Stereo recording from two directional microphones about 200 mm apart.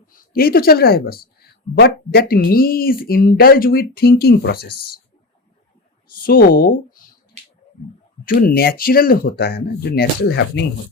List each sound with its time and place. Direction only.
0.1 s speech: 50° left (ahead or behind)
6.2 s speech: 45° left (ahead or behind)
8.2 s speech: 45° left (ahead or behind)